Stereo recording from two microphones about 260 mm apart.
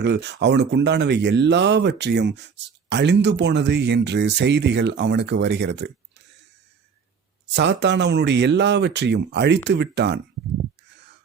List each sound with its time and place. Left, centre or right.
0.0 s speech: right
7.5 s speech: right